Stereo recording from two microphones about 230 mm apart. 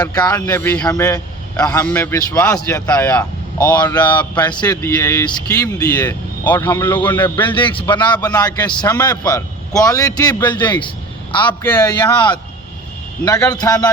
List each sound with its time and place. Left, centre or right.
0.0 s a man's voice: centre